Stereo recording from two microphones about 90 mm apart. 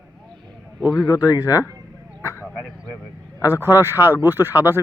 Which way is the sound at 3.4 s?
25° right (ahead or behind).